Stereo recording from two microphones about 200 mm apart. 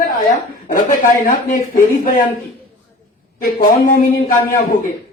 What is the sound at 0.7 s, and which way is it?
Speech, 40° left (ahead or behind).